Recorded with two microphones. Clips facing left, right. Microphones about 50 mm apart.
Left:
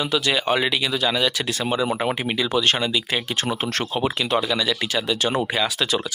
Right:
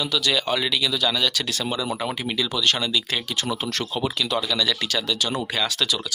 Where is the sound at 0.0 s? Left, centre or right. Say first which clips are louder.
Left 2 dB; left.